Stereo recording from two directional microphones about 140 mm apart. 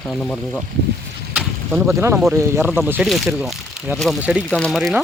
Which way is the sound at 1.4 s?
5° right (ahead or behind).